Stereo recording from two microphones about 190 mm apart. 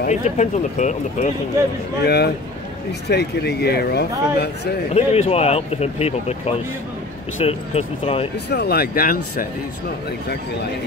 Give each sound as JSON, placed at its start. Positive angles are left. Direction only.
{"t": 0.0, "sound": "speech", "side_deg": 40}
{"t": 2.0, "sound": "speech", "side_deg": 60}
{"t": 4.9, "sound": "speech", "side_deg": 30}
{"t": 8.5, "sound": "speech", "side_deg": 55}